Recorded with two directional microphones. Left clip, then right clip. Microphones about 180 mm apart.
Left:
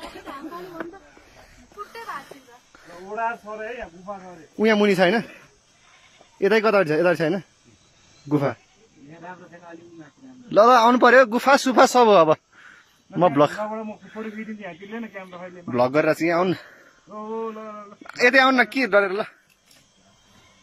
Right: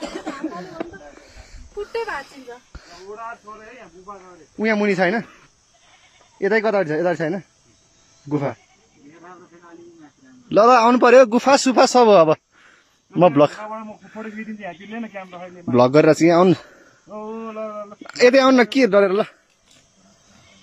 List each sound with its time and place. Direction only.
3.1 s speech: 55° left (ahead or behind)
4.6 s speech: 10° left (ahead or behind)
6.3 s speech: 10° left (ahead or behind)
10.5 s speech: 5° right (ahead or behind)
15.7 s speech: 20° right (ahead or behind)
17.1 s speech: 5° right (ahead or behind)